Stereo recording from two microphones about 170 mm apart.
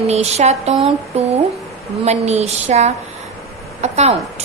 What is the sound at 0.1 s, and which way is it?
A woman's voice, 40° right (ahead or behind).